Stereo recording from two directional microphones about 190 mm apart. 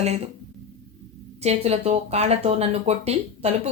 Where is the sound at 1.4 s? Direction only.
35° right (ahead or behind).